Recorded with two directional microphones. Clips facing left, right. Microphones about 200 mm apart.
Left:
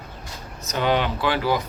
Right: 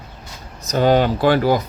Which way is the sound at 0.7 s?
40° right (ahead or behind).